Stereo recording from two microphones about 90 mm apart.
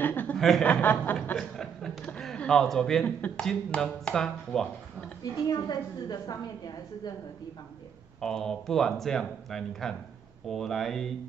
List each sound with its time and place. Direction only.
0.0 s chuckle: 20° left (ahead or behind)
0.4 s speech: 5° left (ahead or behind)
0.7 s chuckle: 15° left (ahead or behind)
2.0 s a sound: 10° left (ahead or behind)
3.3 s speech: 10° left (ahead or behind)
5.2 s a woman's voice: 50° left (ahead or behind)
8.2 s speech: 5° left (ahead or behind)